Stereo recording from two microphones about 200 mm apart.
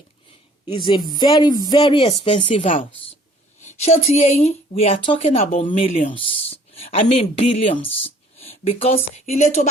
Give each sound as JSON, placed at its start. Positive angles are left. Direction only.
{"t": 0.9, "sound": "a woman's voice", "side_deg": 20}